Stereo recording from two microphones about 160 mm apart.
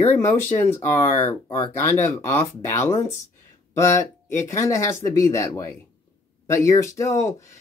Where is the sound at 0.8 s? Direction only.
15° left (ahead or behind).